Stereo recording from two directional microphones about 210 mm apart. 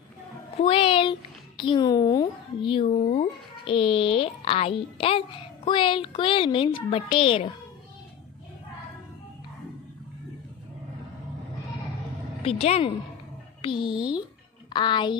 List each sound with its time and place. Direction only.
0.6 s a woman's voice: 25° left (ahead or behind)
12.4 s a woman's voice: 30° left (ahead or behind)